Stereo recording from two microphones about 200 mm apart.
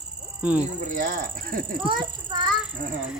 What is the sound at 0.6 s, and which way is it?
Speech, 40° right (ahead or behind).